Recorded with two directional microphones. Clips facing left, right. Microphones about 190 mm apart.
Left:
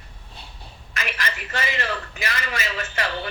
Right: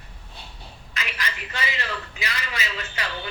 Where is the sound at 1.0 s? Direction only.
50° left (ahead or behind).